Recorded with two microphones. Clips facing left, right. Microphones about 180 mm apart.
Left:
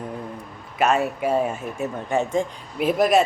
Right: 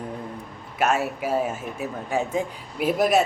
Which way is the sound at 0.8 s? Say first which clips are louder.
Left 3 dB; 5° right (ahead or behind).